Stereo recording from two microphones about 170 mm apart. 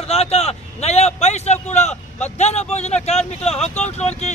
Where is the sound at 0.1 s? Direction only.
35° left (ahead or behind).